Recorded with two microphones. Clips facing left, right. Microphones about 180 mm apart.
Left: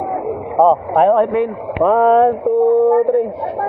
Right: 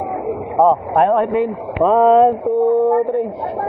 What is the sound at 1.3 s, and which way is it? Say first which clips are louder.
Speech: left 1 dB; 20° right (ahead or behind).